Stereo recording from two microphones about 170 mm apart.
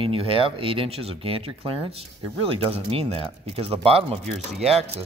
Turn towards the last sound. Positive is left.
turn(degrees=-35)  # may be behind; listen again after turning